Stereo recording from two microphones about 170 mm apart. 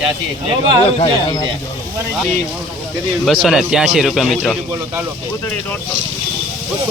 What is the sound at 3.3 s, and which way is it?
A man's voice, centre (ahead or behind).